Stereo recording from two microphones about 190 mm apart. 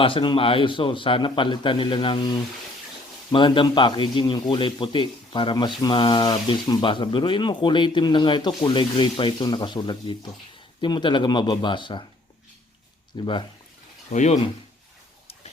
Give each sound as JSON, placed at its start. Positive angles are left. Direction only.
{"t": 0.0, "sound": "a man's voice", "side_deg": 25}
{"t": 13.1, "sound": "a man's voice", "side_deg": 20}
{"t": 14.1, "sound": "speech", "side_deg": 40}